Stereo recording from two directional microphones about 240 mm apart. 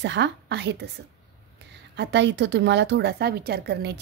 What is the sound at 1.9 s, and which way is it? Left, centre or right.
A woman's voice, right.